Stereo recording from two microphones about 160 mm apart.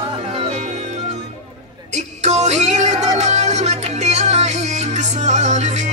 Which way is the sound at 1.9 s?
45° right (ahead or behind).